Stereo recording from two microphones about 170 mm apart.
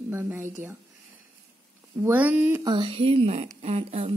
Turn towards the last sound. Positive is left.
turn(degrees=-35)  # may be behind; listen again after turning